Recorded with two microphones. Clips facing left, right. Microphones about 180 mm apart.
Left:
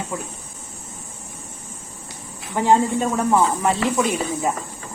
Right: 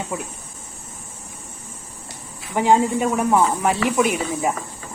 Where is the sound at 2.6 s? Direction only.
15° right (ahead or behind).